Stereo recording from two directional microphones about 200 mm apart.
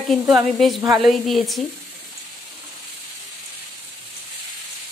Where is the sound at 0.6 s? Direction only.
Centre (ahead or behind).